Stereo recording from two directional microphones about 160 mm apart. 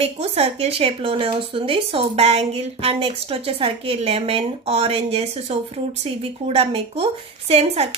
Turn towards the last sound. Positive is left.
turn(degrees=-40)  # may be behind; listen again after turning